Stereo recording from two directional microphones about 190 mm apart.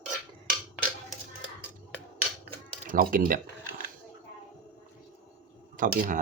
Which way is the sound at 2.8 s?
45° right (ahead or behind).